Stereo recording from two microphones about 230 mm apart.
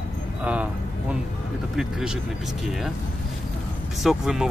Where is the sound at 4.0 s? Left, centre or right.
Centre.